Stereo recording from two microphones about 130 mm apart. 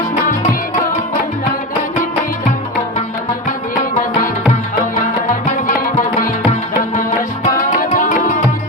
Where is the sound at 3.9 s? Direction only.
90° left.